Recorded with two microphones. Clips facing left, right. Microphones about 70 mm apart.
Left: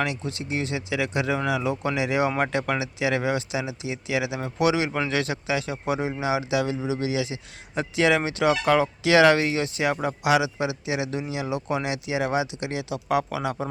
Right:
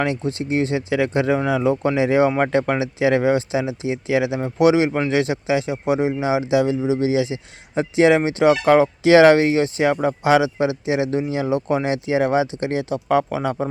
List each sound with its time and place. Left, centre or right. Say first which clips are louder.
0.0 s speech: right 6 dB; right
4.4 s speech: right 6 dB; centre
4.6 s speech: right 7 dB; right